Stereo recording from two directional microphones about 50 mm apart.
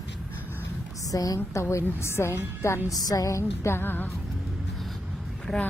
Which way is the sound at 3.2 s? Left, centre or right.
Left.